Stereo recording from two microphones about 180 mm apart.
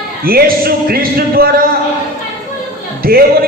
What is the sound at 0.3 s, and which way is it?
A man's voice, 55° right (ahead or behind).